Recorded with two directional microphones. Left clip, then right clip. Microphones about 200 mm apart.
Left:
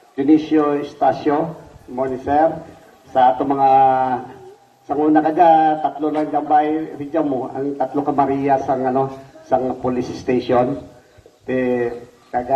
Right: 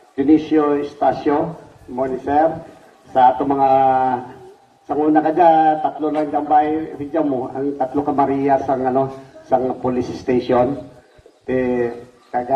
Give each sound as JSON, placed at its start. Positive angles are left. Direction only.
{"t": 0.2, "sound": "a man's voice", "side_deg": 35}